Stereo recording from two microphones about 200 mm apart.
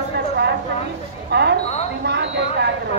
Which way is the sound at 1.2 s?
55° right (ahead or behind).